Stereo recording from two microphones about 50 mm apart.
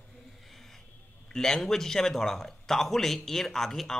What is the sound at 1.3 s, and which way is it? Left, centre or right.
Speech, centre.